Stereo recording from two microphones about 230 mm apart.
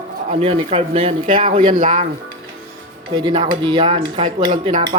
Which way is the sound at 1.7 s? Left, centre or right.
Right.